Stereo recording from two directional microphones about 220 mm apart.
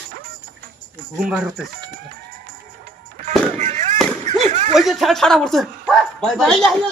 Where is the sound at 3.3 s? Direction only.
30° right (ahead or behind).